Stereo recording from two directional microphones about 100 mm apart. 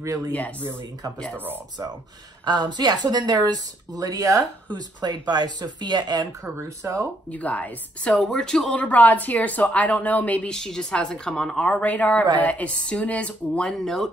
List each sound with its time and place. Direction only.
0.0 s speech: 35° right (ahead or behind)
2.4 s speech: 45° right (ahead or behind)
6.4 s speech: 25° right (ahead or behind)
7.2 s speech: 15° left (ahead or behind)
8.1 s speech: 5° left (ahead or behind)